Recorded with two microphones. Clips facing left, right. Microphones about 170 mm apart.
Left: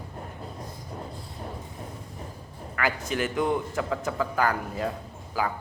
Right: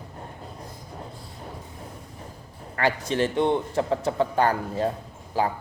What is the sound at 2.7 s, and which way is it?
A man's voice, 30° right (ahead or behind).